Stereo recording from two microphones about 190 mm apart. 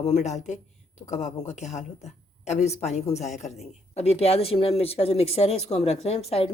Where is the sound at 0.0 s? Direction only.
35° left (ahead or behind).